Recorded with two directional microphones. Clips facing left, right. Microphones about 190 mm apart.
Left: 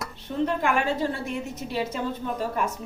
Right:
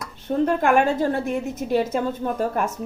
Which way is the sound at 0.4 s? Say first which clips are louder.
Right 5 dB; 50° right (ahead or behind).